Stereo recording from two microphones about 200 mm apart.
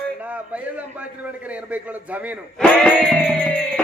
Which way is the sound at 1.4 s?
5° right (ahead or behind).